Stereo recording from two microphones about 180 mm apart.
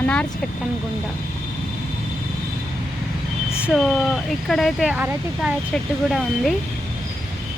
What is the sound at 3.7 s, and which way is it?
Speech, centre (ahead or behind).